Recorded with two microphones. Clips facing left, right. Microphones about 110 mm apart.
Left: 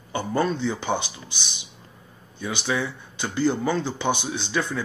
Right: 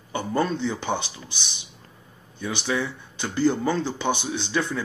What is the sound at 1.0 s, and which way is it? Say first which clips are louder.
Speech: left 1 dB; 25° right (ahead or behind).